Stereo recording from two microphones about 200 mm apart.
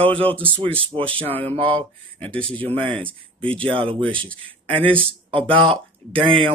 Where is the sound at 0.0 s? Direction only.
25° right (ahead or behind).